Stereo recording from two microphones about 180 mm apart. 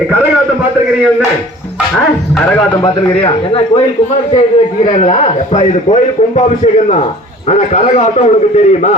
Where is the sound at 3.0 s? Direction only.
30° left (ahead or behind).